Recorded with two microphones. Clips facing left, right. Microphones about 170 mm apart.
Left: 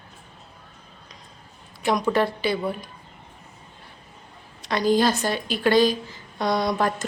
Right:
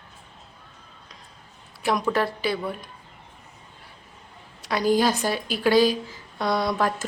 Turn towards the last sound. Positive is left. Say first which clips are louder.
# left 1 dB
turn(degrees=-5)  # may be behind; listen again after turning